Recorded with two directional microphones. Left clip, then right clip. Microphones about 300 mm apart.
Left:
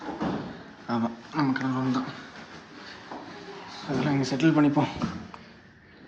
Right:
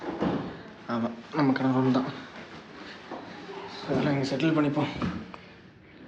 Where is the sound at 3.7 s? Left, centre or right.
Left.